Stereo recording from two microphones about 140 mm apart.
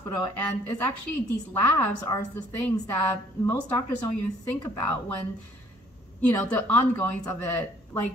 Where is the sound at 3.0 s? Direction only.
15° left (ahead or behind).